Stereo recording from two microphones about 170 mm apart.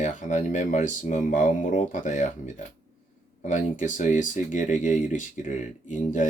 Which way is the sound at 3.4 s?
50° left (ahead or behind).